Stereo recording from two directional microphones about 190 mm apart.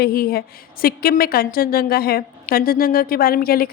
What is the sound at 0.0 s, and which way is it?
A woman's voice, 55° left (ahead or behind).